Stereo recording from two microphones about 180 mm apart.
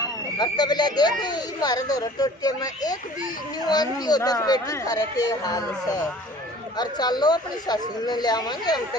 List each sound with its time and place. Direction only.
0.3 s speech: 25° left (ahead or behind)